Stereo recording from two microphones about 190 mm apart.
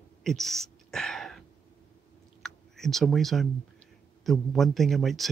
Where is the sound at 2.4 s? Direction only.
Centre (ahead or behind).